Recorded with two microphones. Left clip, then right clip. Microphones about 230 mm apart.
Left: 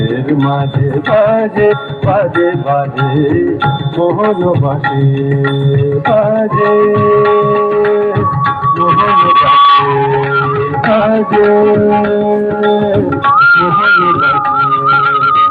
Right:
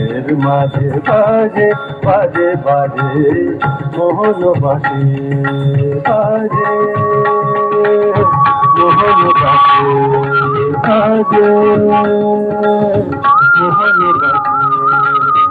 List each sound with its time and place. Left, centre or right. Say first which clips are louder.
1.1 s music: even; left
4.0 s music: right 1 dB; left
6.1 s music: left 2 dB; left